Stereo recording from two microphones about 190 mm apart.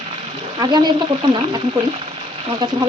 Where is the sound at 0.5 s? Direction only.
20° right (ahead or behind).